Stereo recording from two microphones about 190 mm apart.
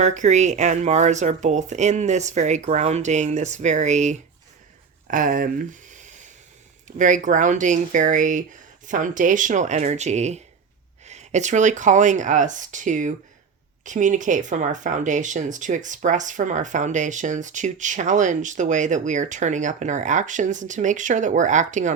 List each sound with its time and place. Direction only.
0.0 s speech: 40° right (ahead or behind)